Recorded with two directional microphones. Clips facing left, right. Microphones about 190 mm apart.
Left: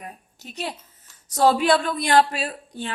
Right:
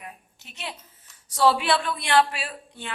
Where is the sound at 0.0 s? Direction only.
40° left (ahead or behind).